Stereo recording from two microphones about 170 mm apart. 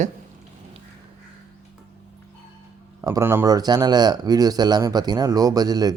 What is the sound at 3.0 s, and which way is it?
Speech, 15° right (ahead or behind).